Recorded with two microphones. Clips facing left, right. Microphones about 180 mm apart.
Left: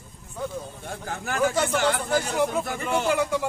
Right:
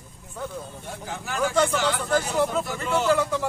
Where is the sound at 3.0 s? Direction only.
15° left (ahead or behind).